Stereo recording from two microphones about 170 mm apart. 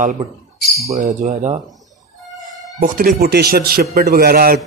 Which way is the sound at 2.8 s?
55° right (ahead or behind).